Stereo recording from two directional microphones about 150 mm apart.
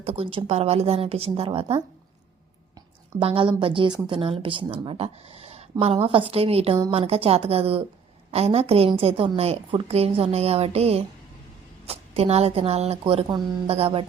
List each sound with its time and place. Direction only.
0.0 s speech: 40° right (ahead or behind)
3.2 s a woman's voice: 35° right (ahead or behind)